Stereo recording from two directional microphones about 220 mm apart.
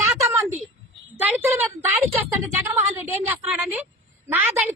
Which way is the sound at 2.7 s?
10° right (ahead or behind).